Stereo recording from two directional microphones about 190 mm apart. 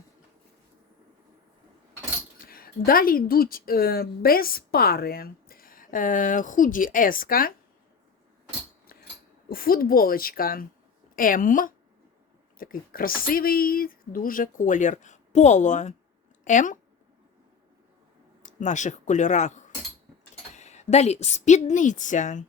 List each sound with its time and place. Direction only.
2.4 s a woman's voice: 50° left (ahead or behind)
9.5 s a woman's voice: 50° left (ahead or behind)
18.4 s a woman's voice: 40° left (ahead or behind)